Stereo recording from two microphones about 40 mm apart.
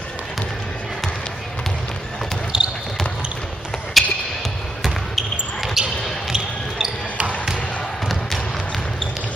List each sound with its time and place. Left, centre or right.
2.5 s basketball bounce: right
4.0 s music: centre
4.8 s basketball bounce: centre